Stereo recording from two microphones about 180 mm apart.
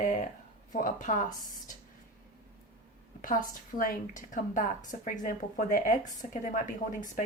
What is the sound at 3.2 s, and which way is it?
A woman's voice, 50° left (ahead or behind).